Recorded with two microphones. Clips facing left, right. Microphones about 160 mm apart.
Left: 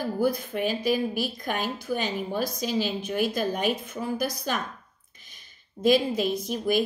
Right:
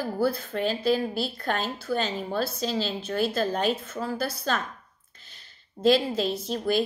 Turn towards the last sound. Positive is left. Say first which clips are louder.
# even
turn(degrees=15)  # may be behind; listen again after turning